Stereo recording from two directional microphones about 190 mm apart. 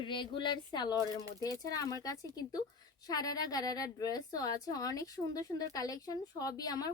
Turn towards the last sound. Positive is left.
turn(degrees=20)  # may be behind; listen again after turning